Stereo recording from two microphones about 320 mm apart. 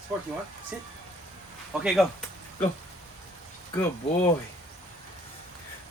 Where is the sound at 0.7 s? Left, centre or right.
Centre.